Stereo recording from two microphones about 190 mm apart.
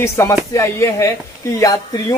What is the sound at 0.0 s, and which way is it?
Speech, 15° left (ahead or behind).